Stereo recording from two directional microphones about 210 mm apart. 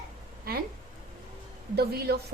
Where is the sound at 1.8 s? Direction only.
50° right (ahead or behind).